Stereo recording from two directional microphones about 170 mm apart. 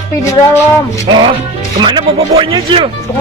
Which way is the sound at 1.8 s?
30° right (ahead or behind).